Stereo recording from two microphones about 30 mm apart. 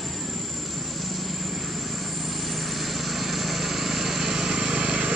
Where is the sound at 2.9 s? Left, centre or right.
Centre.